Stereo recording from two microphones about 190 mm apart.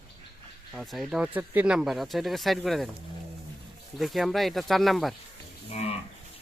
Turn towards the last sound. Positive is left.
turn(degrees=35)  # may be behind; listen again after turning